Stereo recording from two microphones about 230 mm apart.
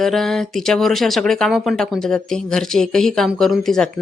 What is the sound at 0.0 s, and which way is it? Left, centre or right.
Speech, centre.